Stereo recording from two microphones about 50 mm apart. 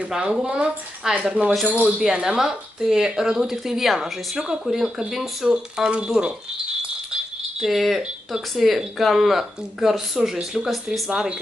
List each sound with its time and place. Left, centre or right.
0.1 s speech: centre
5.9 s speech: right
7.1 s rattle: centre
8.3 s speech: centre